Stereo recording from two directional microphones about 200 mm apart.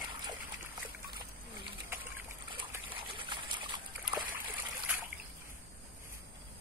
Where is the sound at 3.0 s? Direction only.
25° right (ahead or behind).